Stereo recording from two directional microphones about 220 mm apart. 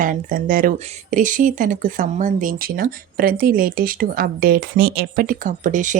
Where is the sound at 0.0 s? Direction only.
40° right (ahead or behind).